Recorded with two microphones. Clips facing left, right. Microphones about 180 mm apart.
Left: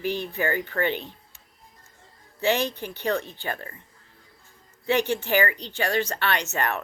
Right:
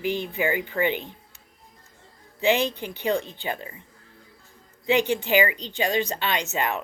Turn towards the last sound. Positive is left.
turn(degrees=-15)  # may be behind; listen again after turning